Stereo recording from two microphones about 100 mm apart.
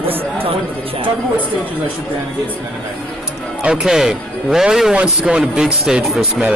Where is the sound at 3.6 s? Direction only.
10° right (ahead or behind).